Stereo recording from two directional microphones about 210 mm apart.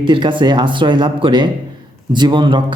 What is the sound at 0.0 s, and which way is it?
Speech, 25° right (ahead or behind).